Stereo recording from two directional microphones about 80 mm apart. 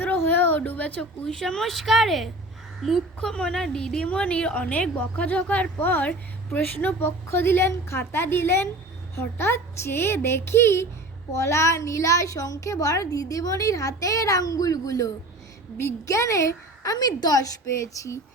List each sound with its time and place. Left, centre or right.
0.0 s a woman's voice: left